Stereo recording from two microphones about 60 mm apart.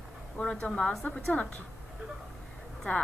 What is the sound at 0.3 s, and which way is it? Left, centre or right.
A woman's voice, centre.